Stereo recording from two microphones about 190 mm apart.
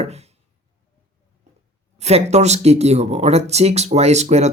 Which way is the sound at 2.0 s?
35° right (ahead or behind).